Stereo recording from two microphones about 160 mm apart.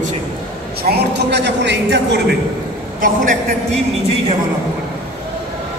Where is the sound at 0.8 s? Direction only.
85° right.